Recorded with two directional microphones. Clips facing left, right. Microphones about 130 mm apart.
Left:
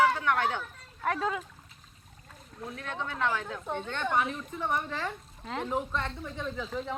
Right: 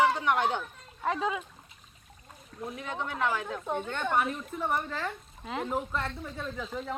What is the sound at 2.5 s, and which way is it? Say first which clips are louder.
Speech: right 2 dB; 10° right (ahead or behind).